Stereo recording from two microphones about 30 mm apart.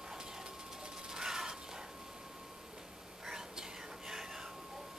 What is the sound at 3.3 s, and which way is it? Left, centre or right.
Whispering, centre.